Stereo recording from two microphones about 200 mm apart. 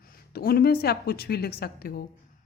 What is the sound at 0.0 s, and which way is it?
A woman's voice, 50° left (ahead or behind).